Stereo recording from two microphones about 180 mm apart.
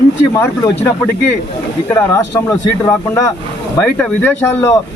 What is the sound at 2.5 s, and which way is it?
A man's voice, 15° left (ahead or behind).